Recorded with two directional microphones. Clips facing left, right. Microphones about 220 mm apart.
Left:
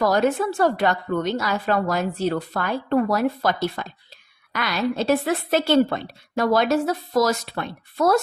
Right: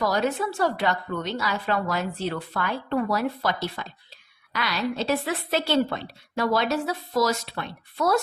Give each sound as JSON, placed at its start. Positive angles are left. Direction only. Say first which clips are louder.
{"t": 0.0, "sound": "a woman's voice", "louder": "left 5 dB", "side_deg": 55}